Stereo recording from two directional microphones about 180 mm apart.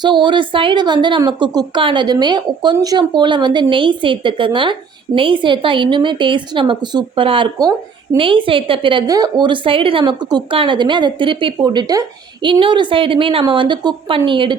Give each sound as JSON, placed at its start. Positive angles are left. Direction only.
{"t": 0.0, "sound": "a woman's voice", "side_deg": -25}